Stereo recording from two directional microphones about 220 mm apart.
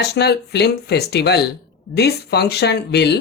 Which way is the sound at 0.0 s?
45° left (ahead or behind).